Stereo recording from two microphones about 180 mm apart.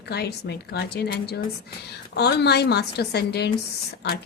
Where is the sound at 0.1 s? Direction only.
65° left (ahead or behind).